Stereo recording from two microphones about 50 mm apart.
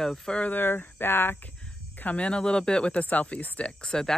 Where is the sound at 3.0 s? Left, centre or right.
Left.